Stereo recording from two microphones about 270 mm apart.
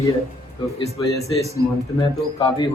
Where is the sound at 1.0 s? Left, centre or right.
Centre.